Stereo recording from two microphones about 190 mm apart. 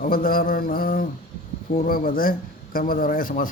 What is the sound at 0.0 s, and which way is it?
A man's voice, 50° left (ahead or behind).